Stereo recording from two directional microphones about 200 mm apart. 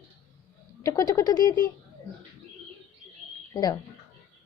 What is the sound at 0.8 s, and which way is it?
Speech, 15° left (ahead or behind).